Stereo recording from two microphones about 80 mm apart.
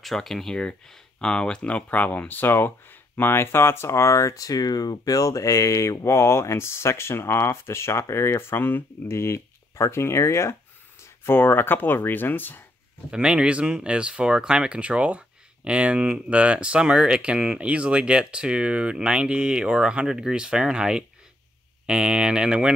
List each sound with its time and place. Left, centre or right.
0.0 s speech: centre; by 12.6 s left
13.1 s speech: centre